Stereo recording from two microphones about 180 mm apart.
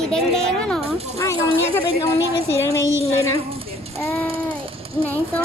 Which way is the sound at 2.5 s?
15° left (ahead or behind).